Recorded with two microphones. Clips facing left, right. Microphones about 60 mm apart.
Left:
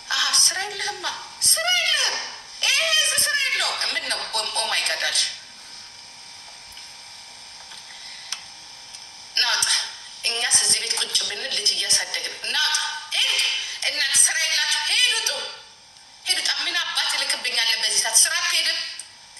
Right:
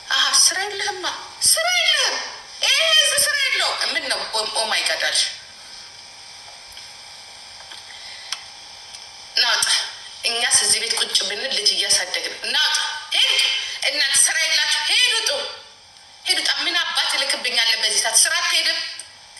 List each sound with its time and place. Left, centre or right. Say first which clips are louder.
0.1 s a woman's voice: right 4 dB; right
9.3 s a woman's voice: right 3 dB; right